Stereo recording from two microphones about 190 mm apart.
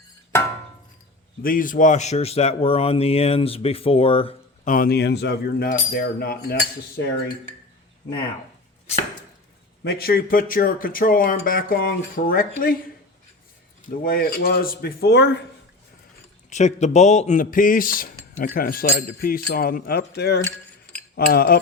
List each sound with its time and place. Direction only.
1.4 s speech: 45° left (ahead or behind); by 4.7 s 30° left (ahead or behind)
4.7 s speech: 50° left (ahead or behind)
9.8 s speech: 55° left (ahead or behind)
14.0 s speech: 50° left (ahead or behind); by 15.4 s 65° left (ahead or behind)
16.5 s speech: 40° left (ahead or behind)